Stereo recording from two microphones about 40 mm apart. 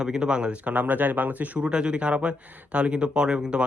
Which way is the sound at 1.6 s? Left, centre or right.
Right.